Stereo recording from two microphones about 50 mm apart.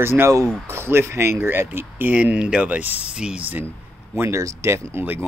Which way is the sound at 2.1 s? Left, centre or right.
Right.